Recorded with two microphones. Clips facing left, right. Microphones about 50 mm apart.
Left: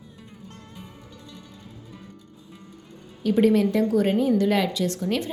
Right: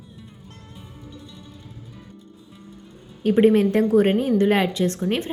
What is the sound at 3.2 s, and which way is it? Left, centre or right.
A woman's voice, right.